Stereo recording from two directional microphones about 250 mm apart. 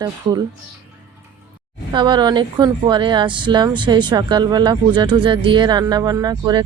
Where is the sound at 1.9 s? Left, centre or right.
Centre.